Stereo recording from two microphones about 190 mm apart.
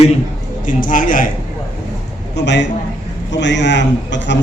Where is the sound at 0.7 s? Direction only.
45° left (ahead or behind).